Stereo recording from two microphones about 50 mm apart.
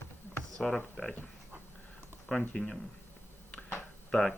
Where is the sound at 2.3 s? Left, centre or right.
Centre.